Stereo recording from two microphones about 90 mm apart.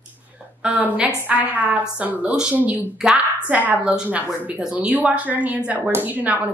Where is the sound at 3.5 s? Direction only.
20° right (ahead or behind).